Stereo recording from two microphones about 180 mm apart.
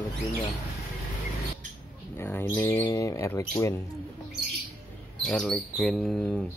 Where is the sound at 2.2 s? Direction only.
10° left (ahead or behind).